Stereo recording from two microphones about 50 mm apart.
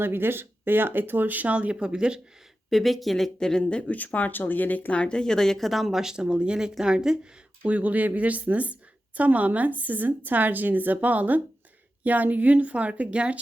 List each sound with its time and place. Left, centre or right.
0.0 s a woman's voice: right; by 2.2 s centre
2.6 s speech: centre
3.6 s speech: left
4.9 s speech: centre
7.6 s a woman's voice: right